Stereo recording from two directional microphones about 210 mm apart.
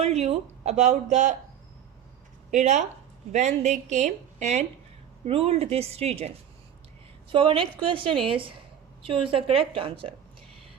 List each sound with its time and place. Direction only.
0.0 s speech: 30° right (ahead or behind)
2.5 s a woman's voice: 35° right (ahead or behind)